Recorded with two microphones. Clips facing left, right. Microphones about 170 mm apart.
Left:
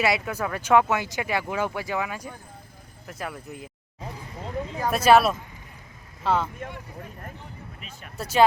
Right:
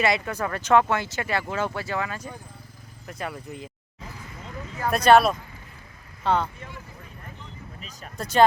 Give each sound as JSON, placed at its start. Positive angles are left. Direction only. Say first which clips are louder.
{"t": 0.0, "sound": "speech", "louder": "even", "side_deg": 5}
{"t": 3.1, "sound": "speech", "louder": "right 1 dB", "side_deg": 0}
{"t": 4.9, "sound": "speech", "louder": "right 1 dB", "side_deg": 5}
{"t": 7.8, "sound": "speech", "louder": "right 1 dB", "side_deg": -35}
{"t": 8.1, "sound": "speech", "louder": "right 1 dB", "side_deg": 5}